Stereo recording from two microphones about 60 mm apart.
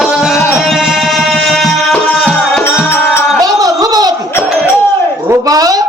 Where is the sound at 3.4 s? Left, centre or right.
Right.